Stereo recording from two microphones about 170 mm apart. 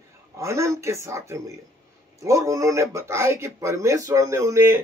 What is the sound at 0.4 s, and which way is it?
A woman's voice, 15° right (ahead or behind).